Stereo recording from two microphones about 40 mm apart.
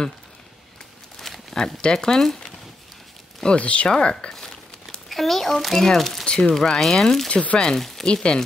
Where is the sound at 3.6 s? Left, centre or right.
Left.